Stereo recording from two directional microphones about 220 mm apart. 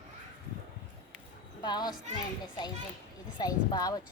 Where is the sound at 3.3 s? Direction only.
20° left (ahead or behind).